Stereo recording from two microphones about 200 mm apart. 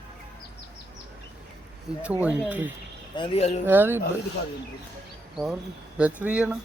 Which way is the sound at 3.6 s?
10° right (ahead or behind).